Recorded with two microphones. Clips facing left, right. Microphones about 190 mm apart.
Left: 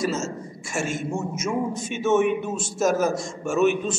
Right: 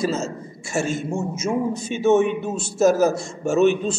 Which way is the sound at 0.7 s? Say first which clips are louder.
Right 3 dB; 35° right (ahead or behind).